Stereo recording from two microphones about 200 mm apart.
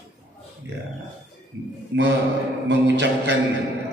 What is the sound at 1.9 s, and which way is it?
A man's voice, 65° right (ahead or behind).